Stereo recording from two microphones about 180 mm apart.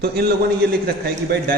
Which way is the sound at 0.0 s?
60° right (ahead or behind).